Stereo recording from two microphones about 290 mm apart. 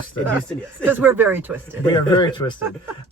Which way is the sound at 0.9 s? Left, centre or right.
Centre.